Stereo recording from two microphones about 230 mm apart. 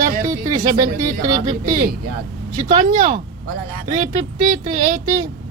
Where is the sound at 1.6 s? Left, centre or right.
Right.